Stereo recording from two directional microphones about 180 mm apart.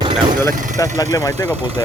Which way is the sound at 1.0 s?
20° left (ahead or behind).